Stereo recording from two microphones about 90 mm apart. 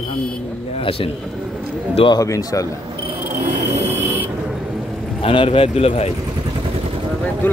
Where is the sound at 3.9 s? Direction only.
20° right (ahead or behind).